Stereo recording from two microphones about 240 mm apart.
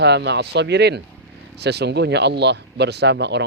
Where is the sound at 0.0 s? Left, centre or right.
Right.